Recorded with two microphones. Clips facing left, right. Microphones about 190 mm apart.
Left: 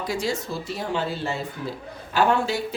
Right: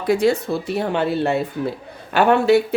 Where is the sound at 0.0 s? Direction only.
60° right (ahead or behind).